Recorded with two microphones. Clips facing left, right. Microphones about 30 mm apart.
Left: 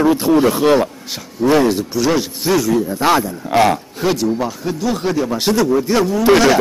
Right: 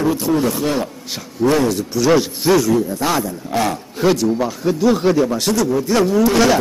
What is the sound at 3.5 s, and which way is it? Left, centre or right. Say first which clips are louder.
Speech: left 7 dB; left.